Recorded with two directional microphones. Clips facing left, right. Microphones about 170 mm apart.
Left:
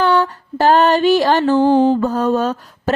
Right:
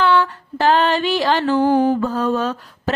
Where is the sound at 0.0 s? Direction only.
40° left (ahead or behind).